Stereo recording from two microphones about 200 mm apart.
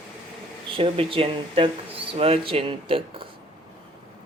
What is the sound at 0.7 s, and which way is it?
Speech, 25° right (ahead or behind).